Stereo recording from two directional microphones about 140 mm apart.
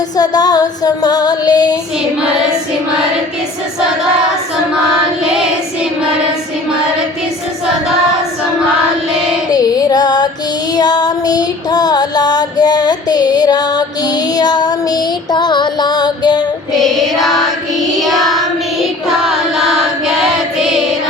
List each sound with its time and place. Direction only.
0.2 s female singing: 30° left (ahead or behind)
5.2 s child singing: 5° right (ahead or behind)
9.5 s music: 25° left (ahead or behind)
16.7 s music: centre (ahead or behind)
18.0 s child singing: centre (ahead or behind)